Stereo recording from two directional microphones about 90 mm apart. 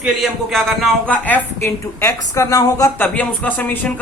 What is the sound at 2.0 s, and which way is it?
Speech, 35° left (ahead or behind).